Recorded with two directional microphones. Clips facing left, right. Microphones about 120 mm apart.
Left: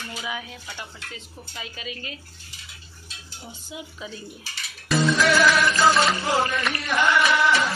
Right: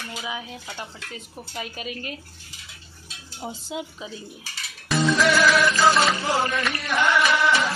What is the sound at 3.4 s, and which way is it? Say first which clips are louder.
Stir: right 7 dB; 85° right.